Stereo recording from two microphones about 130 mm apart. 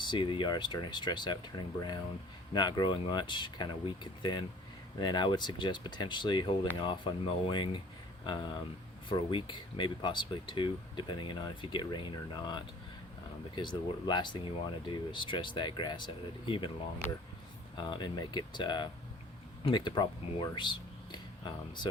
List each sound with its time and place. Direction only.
0.0 s speech: 40° left (ahead or behind)
17.7 s speech: 35° left (ahead or behind)